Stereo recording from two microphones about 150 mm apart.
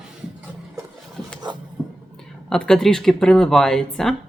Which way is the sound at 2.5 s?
5° left (ahead or behind).